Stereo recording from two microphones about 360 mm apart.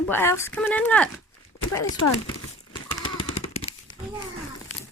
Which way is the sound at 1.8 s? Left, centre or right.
Left.